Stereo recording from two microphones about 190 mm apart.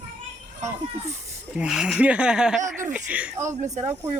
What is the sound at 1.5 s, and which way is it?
Speech, 5° right (ahead or behind).